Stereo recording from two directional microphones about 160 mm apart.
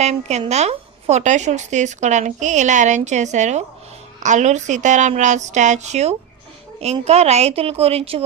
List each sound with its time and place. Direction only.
0.0 s a woman's voice: 45° right (ahead or behind)